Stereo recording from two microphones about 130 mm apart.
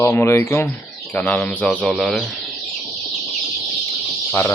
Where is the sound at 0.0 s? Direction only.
20° left (ahead or behind); by 2.2 s centre (ahead or behind).